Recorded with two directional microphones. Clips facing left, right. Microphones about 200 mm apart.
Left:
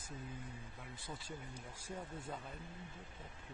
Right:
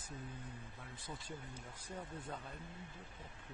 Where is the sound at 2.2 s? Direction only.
Centre (ahead or behind).